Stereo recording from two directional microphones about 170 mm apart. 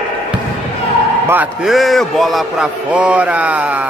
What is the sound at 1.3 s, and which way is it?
A man's voice, 5° right (ahead or behind).